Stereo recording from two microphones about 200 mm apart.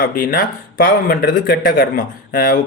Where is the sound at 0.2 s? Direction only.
45° left (ahead or behind).